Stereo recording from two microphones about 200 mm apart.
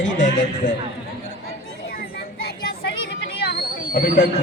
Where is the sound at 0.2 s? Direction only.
40° left (ahead or behind).